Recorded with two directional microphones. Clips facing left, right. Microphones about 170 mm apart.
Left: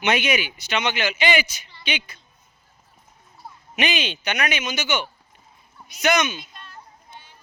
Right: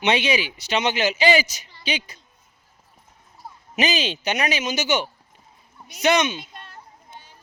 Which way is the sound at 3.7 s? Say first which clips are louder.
Right 2 dB; 35° right (ahead or behind).